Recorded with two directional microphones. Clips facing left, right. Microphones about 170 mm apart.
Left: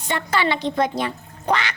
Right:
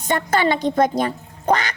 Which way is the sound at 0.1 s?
45° right (ahead or behind).